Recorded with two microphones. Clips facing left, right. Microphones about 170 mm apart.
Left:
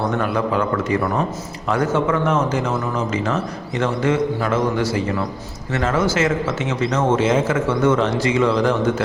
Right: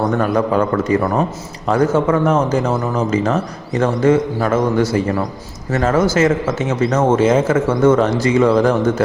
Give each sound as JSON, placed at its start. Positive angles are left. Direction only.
{"t": 0.2, "sound": "a man's voice", "side_deg": -40}